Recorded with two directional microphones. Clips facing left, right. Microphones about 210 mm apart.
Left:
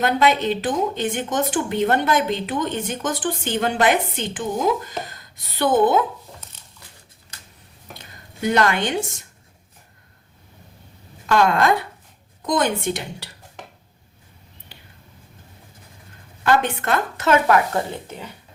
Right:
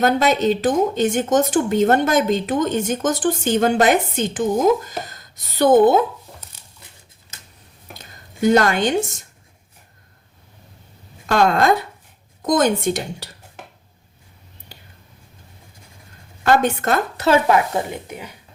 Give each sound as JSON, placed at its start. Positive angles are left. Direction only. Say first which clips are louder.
{"t": 0.0, "sound": "a woman's voice", "louder": "right 2 dB", "side_deg": -40}
{"t": 7.9, "sound": "a sound", "louder": "right 7 dB", "side_deg": -40}
{"t": 11.3, "sound": "a woman's voice", "louder": "right 1 dB", "side_deg": -40}
{"t": 16.4, "sound": "a woman's voice", "louder": "right 3 dB", "side_deg": -40}
{"t": 17.4, "sound": "speech", "louder": "right 1 dB", "side_deg": -20}